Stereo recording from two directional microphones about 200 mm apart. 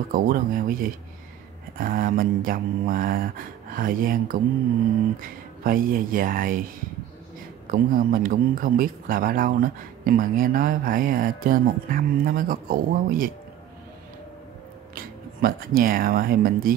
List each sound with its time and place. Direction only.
0.1 s a man's voice: 45° right (ahead or behind)
7.6 s a man's voice: 45° right (ahead or behind)
15.0 s speech: 45° right (ahead or behind)